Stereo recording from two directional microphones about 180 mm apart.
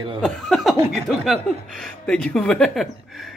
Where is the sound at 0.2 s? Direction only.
Centre (ahead or behind).